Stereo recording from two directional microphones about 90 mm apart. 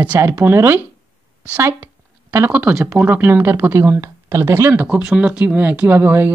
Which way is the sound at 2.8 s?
20° right (ahead or behind).